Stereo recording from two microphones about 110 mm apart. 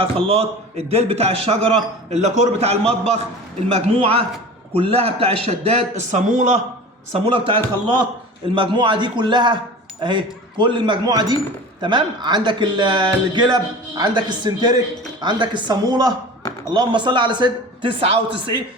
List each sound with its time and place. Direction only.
0.0 s a man's voice: 60° right (ahead or behind); by 6.6 s 90° right
7.1 s a man's voice: 55° right (ahead or behind)